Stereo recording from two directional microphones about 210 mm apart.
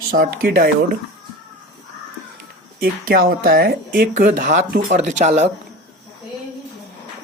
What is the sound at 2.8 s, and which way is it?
Speech, 45° right (ahead or behind).